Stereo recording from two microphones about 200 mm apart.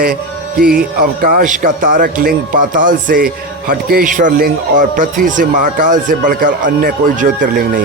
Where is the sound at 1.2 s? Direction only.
45° right (ahead or behind).